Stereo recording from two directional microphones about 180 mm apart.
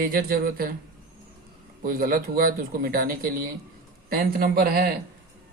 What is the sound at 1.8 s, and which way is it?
Speech, 55° right (ahead or behind).